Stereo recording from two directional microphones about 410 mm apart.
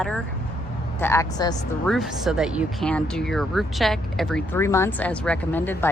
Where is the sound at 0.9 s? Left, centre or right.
Centre.